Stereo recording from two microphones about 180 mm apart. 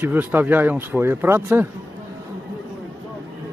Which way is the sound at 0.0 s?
10° right (ahead or behind).